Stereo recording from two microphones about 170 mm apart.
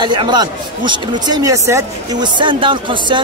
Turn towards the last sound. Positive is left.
turn(degrees=-30)  # may be behind; listen again after turning